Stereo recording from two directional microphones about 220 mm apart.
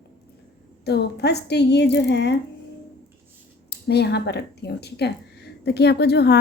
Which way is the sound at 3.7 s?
50° left (ahead or behind).